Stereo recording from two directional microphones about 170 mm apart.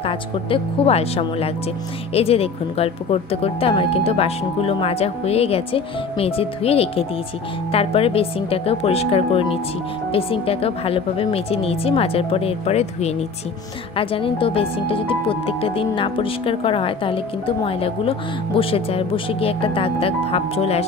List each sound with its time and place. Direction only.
0.0 s speech: 30° left (ahead or behind)